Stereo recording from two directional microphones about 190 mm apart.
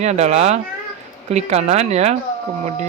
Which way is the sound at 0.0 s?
35° right (ahead or behind).